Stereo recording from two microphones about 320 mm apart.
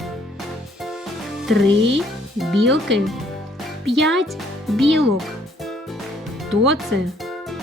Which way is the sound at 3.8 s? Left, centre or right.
Centre.